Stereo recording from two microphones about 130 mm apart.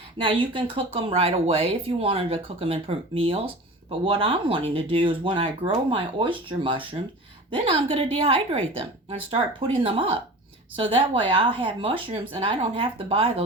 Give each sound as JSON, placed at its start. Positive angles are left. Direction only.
{"t": 0.2, "sound": "speech", "side_deg": -40}